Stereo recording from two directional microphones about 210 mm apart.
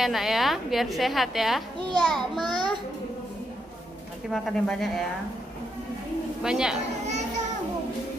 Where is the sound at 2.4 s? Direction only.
20° right (ahead or behind).